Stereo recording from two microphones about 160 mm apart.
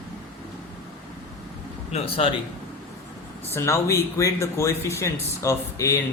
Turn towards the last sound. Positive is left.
turn(degrees=20)  # may be behind; listen again after turning